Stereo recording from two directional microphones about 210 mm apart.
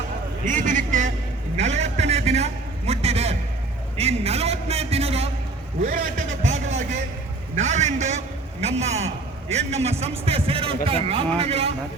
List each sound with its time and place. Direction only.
0.4 s a man's voice: 35° right (ahead or behind)
1.5 s a sound: 30° right (ahead or behind)
3.9 s a man's voice: 30° right (ahead or behind)